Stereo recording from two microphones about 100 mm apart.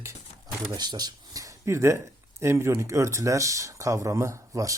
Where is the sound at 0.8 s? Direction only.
45° right (ahead or behind).